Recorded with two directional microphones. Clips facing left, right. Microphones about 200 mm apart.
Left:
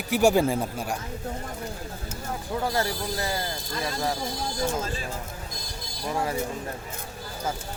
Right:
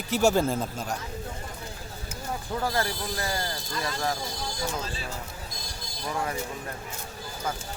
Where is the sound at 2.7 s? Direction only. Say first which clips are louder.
Left 2 dB; 25° left (ahead or behind).